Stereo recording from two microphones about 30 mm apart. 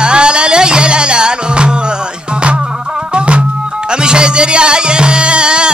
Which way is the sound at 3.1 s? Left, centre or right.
Right.